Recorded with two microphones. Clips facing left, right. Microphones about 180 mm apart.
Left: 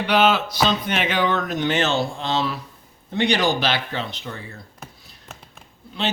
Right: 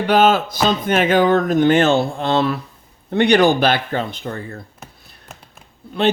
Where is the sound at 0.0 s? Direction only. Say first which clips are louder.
Right 4 dB; 45° right (ahead or behind).